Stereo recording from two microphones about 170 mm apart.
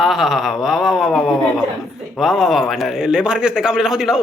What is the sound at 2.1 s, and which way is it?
Speech, centre (ahead or behind).